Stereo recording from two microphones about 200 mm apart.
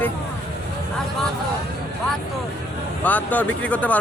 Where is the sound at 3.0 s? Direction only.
10° left (ahead or behind).